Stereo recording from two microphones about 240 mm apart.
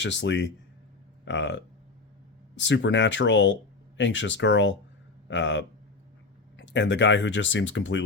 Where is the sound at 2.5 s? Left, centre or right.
Left.